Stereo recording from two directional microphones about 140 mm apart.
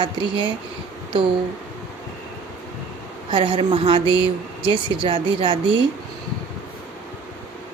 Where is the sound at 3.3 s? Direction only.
35° right (ahead or behind).